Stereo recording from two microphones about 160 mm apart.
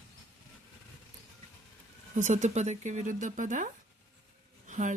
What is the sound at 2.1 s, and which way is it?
Speech, 50° right (ahead or behind).